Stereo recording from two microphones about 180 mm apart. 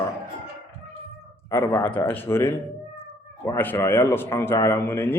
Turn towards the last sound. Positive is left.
turn(degrees=10)  # may be behind; listen again after turning